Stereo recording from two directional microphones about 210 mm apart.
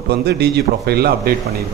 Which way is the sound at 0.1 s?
50° right (ahead or behind).